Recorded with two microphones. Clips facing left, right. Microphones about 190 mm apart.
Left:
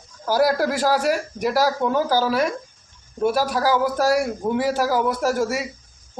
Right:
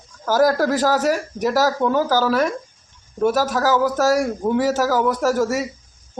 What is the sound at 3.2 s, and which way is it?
Speech, 45° right (ahead or behind).